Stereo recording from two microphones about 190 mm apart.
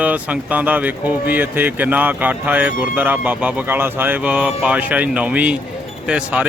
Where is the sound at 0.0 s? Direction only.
10° right (ahead or behind).